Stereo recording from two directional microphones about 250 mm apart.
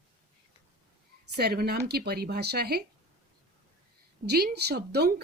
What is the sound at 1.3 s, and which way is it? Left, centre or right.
Speech, right.